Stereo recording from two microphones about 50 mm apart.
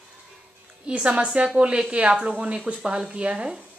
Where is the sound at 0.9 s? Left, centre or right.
Right.